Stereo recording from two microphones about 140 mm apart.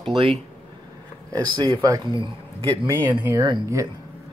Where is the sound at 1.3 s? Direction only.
30° right (ahead or behind).